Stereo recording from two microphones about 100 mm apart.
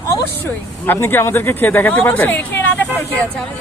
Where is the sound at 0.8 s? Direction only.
20° left (ahead or behind).